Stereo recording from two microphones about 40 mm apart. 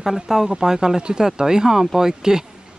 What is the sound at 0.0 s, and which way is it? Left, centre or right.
Speech, centre.